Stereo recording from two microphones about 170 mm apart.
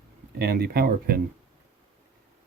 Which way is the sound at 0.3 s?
65° right (ahead or behind).